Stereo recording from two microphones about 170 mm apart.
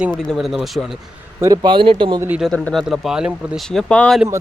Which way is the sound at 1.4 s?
25° right (ahead or behind).